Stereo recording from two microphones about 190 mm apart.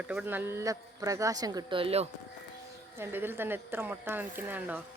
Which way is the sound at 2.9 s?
10° right (ahead or behind).